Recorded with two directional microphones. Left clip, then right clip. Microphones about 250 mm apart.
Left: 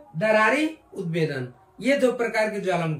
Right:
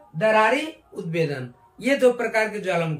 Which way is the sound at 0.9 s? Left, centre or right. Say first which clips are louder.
Right 1 dB; centre.